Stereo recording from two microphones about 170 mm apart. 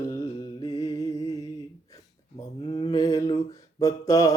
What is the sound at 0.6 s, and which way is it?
Mantra, 20° left (ahead or behind).